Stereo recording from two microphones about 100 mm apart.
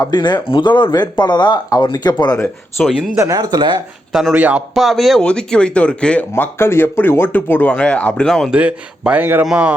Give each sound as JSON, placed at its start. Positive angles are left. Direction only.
{"t": 0.0, "sound": "speech", "side_deg": 45}
{"t": 2.8, "sound": "speech", "side_deg": 10}
{"t": 3.2, "sound": "speech", "side_deg": -40}
{"t": 4.1, "sound": "a man's voice", "side_deg": -5}
{"t": 4.7, "sound": "speech", "side_deg": 0}
{"t": 6.3, "sound": "speech", "side_deg": 25}
{"t": 8.4, "sound": "a man's voice", "side_deg": -10}